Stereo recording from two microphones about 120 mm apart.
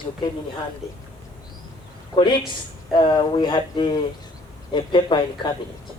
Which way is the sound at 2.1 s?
40° left (ahead or behind).